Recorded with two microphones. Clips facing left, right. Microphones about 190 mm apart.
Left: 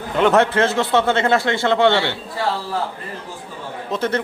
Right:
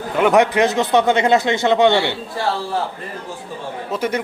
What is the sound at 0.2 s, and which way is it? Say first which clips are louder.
Speech: right 1 dB; 15° right (ahead or behind).